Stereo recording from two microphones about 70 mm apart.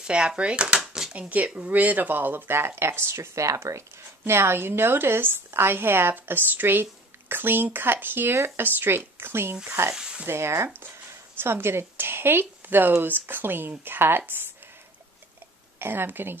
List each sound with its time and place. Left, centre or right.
0.0 s speech: centre
1.1 s a woman's voice: centre; by 3.8 s right
4.2 s a woman's voice: right
9.9 s speech: centre
10.2 s a woman's voice: right
15.8 s a woman's voice: right